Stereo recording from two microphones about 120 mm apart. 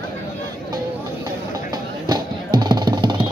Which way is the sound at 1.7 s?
35° right (ahead or behind).